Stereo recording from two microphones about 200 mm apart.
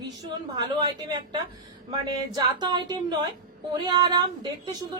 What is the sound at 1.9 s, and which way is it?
A woman's voice, 20° right (ahead or behind).